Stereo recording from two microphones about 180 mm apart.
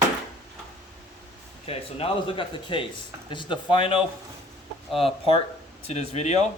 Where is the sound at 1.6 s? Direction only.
35° left (ahead or behind).